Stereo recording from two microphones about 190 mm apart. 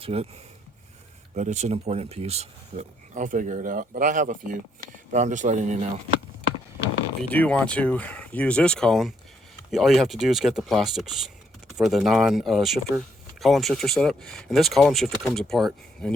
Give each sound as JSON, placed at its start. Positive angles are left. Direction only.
{"t": 0.0, "sound": "speech", "side_deg": -30}
{"t": 1.4, "sound": "speech", "side_deg": -35}
{"t": 7.2, "sound": "speech", "side_deg": 10}